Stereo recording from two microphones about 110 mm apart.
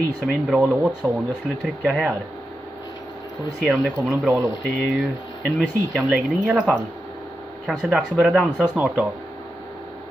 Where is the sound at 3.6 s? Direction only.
10° right (ahead or behind).